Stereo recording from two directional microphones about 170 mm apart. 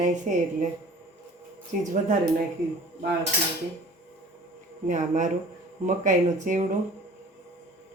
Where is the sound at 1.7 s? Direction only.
50° right (ahead or behind).